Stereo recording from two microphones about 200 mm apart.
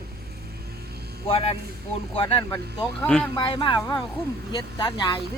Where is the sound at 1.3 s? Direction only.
30° left (ahead or behind).